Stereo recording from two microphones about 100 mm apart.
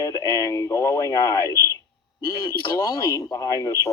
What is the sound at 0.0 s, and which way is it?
Speech, 35° left (ahead or behind).